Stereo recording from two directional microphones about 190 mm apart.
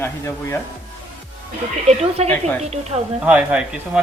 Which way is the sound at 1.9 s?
35° right (ahead or behind).